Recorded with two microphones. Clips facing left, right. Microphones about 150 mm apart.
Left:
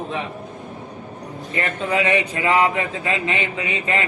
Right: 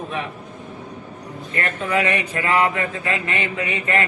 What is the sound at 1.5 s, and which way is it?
Speech, 20° left (ahead or behind).